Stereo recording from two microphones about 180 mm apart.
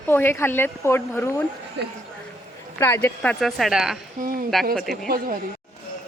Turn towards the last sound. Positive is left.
turn(degrees=-55)  # may be behind; listen again after turning